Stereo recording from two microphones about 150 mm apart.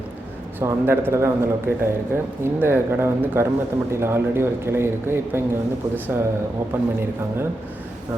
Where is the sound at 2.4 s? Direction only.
15° right (ahead or behind).